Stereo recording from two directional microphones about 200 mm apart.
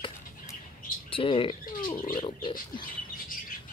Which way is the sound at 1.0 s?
25° left (ahead or behind).